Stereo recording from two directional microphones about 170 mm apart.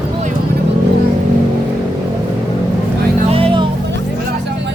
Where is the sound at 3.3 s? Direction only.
30° right (ahead or behind).